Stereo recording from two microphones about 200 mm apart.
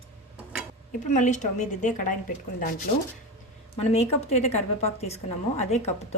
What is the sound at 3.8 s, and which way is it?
Speech, 30° left (ahead or behind).